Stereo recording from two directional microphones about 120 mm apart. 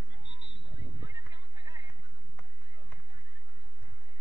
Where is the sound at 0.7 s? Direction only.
30° right (ahead or behind).